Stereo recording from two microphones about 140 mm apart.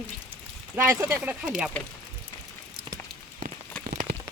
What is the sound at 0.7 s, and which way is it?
Speech, 15° right (ahead or behind).